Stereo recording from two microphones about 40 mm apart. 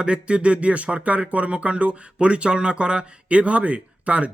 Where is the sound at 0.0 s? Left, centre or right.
Right.